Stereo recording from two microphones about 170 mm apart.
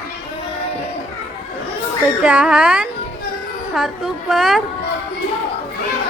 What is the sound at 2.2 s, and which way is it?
A woman's voice, 10° right (ahead or behind).